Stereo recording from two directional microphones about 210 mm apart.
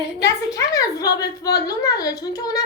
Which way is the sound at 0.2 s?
15° left (ahead or behind).